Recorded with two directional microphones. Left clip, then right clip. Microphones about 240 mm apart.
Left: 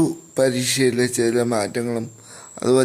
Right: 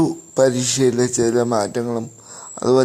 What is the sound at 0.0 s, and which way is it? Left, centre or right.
Speech, centre.